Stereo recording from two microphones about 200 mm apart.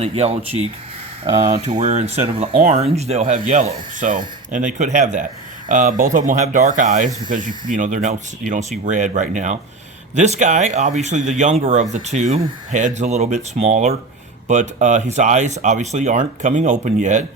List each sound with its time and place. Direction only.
0.0 s speech: 30° right (ahead or behind)